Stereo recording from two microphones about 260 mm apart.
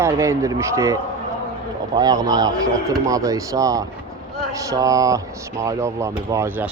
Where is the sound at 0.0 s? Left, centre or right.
Centre.